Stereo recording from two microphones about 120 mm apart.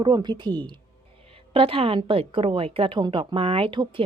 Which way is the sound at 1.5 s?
50° right (ahead or behind).